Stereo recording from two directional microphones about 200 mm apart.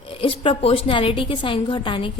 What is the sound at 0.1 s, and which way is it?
A woman's voice, 25° left (ahead or behind).